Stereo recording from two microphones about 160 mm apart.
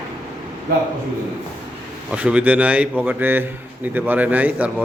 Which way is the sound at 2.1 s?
10° right (ahead or behind).